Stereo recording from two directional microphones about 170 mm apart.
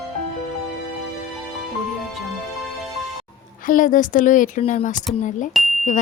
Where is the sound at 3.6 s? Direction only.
50° left (ahead or behind).